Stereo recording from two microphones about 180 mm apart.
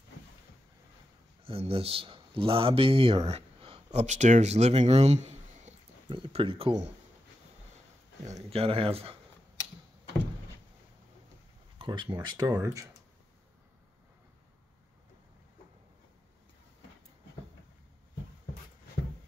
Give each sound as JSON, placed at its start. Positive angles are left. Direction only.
{"t": 1.4, "sound": "speech", "side_deg": -30}
{"t": 8.3, "sound": "speech", "side_deg": -35}
{"t": 11.8, "sound": "speech", "side_deg": -25}